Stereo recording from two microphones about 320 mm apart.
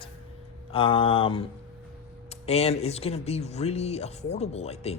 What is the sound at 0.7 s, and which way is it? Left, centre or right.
Speech, centre.